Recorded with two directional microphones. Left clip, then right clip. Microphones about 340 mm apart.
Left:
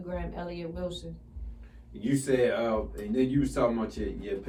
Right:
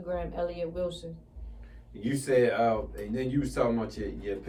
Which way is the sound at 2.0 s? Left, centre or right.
Centre.